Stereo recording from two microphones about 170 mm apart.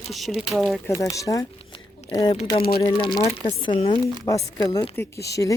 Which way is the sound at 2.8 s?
35° left (ahead or behind).